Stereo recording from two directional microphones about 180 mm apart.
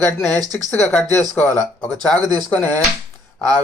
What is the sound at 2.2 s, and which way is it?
Speech, 25° right (ahead or behind).